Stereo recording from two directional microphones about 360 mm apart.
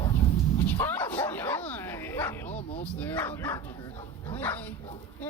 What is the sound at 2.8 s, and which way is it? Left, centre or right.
Speech, centre.